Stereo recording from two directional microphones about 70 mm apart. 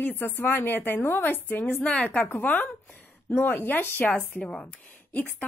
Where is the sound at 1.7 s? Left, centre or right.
Centre.